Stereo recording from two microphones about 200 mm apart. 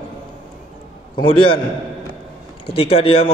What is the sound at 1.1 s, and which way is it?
Speech, 25° left (ahead or behind).